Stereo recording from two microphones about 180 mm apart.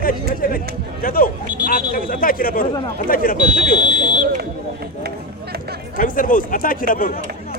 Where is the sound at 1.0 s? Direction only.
50° left (ahead or behind).